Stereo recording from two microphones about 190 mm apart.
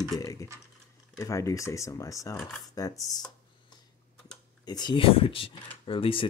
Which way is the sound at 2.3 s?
Centre (ahead or behind).